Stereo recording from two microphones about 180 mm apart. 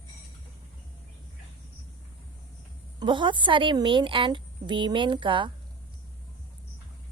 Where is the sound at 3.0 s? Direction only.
25° right (ahead or behind).